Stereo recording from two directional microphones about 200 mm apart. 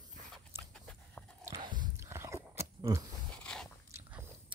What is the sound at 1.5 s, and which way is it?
Biting, 20° right (ahead or behind).